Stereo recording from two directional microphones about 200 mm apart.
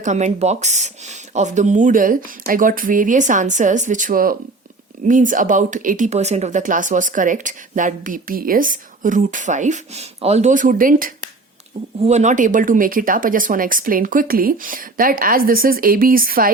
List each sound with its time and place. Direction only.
0.0 s speech: 35° right (ahead or behind)